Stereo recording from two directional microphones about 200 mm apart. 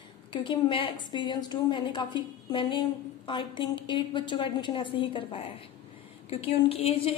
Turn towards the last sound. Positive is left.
turn(degrees=30)  # may be behind; listen again after turning